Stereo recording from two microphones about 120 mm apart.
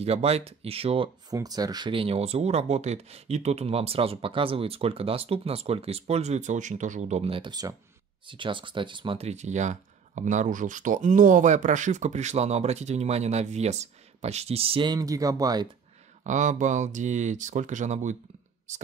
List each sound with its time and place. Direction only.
0.0 s speech: 60° right (ahead or behind)
1.3 s speech: 30° right (ahead or behind)
9.2 s speech: 70° right (ahead or behind); by 14.9 s 50° right (ahead or behind)
14.9 s speech: 30° right (ahead or behind)
16.3 s speech: 90° right